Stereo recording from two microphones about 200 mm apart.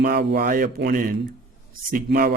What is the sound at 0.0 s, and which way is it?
Speech, 55° right (ahead or behind).